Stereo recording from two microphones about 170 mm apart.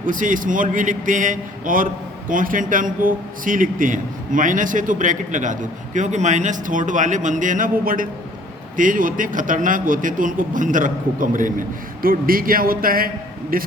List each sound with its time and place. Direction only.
0.0 s a man's voice: 50° right (ahead or behind)